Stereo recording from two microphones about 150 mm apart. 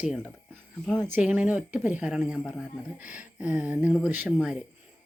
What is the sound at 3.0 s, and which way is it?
Speech, 60° left (ahead or behind).